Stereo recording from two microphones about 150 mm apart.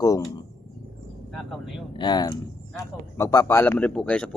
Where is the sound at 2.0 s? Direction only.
30° left (ahead or behind); by 4.4 s 5° left (ahead or behind).